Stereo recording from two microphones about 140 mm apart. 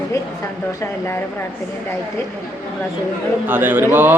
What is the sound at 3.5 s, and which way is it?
Speech, 15° right (ahead or behind).